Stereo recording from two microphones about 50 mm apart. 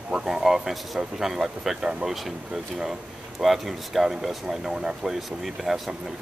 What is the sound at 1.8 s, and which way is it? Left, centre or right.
Speech, centre.